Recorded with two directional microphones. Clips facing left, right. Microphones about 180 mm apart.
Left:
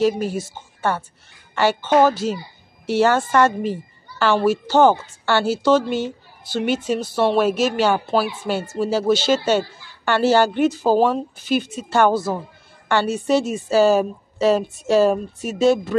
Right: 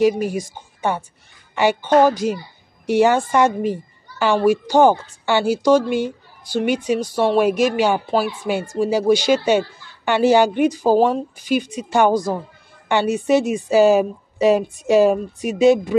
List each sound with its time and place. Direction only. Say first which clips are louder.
0.0 s a woman's voice: right 2 dB; 15° right (ahead or behind)